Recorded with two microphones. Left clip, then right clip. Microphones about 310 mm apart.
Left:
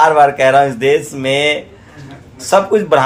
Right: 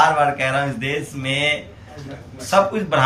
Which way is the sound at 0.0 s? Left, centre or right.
Centre.